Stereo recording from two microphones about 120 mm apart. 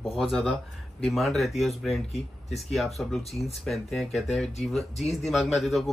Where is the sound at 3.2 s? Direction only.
60° left (ahead or behind).